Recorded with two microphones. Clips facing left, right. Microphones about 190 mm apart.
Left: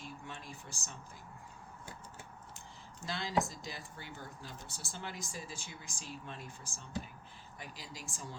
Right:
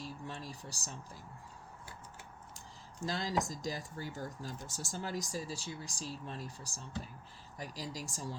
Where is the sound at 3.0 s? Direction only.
40° right (ahead or behind).